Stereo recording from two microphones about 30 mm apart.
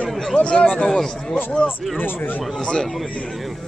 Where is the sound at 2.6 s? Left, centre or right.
Left.